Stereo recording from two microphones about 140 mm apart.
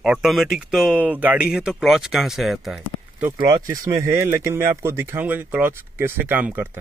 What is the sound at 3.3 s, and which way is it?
Speech, 25° right (ahead or behind).